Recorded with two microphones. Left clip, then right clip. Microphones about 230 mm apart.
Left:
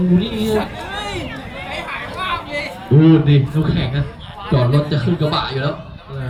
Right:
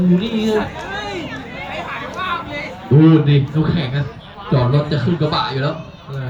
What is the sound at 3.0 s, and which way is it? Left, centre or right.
A man's voice, centre.